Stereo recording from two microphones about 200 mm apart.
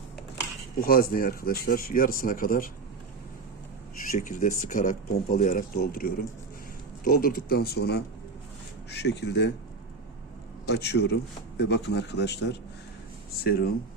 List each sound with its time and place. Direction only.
0.8 s speech: 50° left (ahead or behind)
4.1 s speech: 40° left (ahead or behind); by 9.5 s 60° left (ahead or behind)
10.7 s speech: 55° left (ahead or behind)